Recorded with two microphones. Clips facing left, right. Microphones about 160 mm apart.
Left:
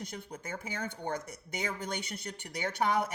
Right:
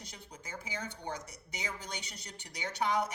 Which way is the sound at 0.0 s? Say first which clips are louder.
Left 8 dB; 55° left (ahead or behind).